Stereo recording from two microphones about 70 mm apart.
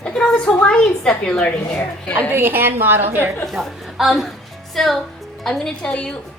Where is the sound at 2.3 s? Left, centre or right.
Right.